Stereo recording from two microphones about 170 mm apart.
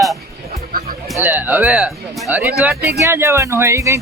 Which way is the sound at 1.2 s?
10° right (ahead or behind).